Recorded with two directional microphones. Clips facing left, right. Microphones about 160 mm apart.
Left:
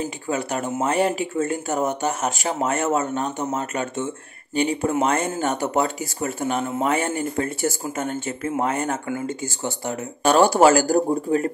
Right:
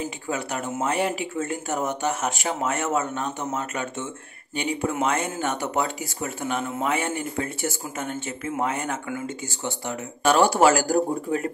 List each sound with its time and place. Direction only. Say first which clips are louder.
0.3 s speech: left 4 dB; 40° left (ahead or behind)